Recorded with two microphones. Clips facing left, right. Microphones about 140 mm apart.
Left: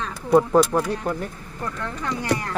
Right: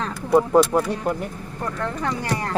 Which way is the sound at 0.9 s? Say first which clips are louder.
Right 1 dB; 15° right (ahead or behind).